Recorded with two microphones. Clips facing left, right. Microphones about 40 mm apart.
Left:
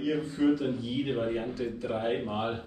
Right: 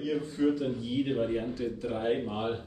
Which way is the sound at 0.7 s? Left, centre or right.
Centre.